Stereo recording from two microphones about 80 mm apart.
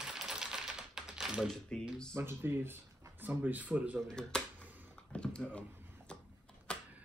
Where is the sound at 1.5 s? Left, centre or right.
Centre.